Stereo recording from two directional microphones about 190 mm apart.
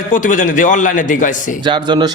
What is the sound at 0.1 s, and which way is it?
A man's voice, 40° left (ahead or behind).